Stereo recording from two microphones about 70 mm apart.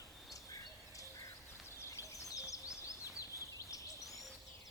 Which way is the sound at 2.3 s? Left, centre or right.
Left.